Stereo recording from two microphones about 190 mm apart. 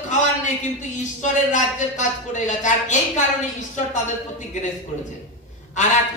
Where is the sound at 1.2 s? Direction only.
40° left (ahead or behind).